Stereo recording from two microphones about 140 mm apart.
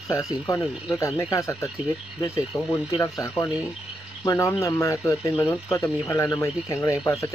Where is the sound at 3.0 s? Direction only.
25° left (ahead or behind).